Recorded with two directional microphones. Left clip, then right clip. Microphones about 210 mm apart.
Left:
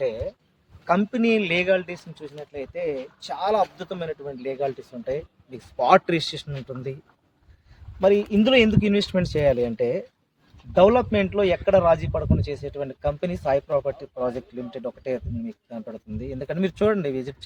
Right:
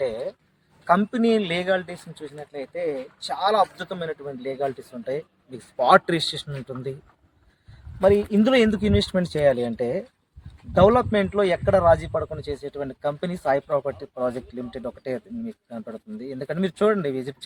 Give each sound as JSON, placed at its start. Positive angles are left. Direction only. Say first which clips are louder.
{"t": 0.0, "sound": "speech", "louder": "even", "side_deg": 15}
{"t": 8.0, "sound": "speech", "louder": "even", "side_deg": 5}